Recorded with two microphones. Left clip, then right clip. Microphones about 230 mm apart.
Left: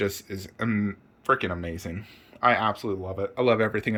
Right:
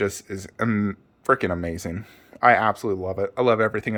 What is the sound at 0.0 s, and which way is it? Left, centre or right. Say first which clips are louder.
Speech: right 3 dB; centre.